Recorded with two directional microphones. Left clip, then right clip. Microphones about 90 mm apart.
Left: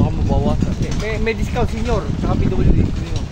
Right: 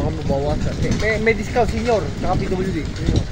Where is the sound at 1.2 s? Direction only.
20° left (ahead or behind).